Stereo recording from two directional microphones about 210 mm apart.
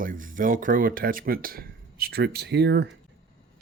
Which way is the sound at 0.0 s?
40° right (ahead or behind).